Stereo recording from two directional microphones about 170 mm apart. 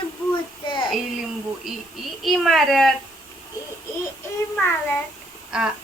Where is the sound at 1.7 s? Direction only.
Centre (ahead or behind).